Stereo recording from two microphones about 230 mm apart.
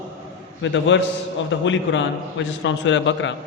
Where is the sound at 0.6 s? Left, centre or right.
Left.